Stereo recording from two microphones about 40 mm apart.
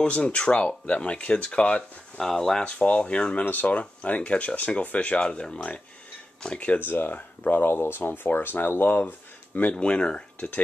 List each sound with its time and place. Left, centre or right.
0.0 s speech: left
2.1 s speech: centre
2.6 s speech: left
3.4 s speech: left
3.7 s speech: left
5.2 s speech: left
6.8 s speech: left
7.6 s speech: left
9.8 s speech: left